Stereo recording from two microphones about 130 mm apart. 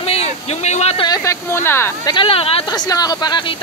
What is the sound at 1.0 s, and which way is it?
Speech, 25° left (ahead or behind).